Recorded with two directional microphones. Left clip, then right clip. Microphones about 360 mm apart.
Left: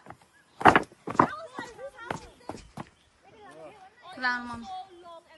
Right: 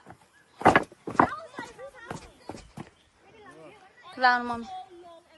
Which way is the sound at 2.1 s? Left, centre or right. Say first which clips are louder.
Left 3 dB; centre.